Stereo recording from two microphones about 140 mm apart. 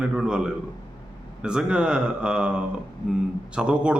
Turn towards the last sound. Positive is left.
turn(degrees=-5)  # may be behind; listen again after turning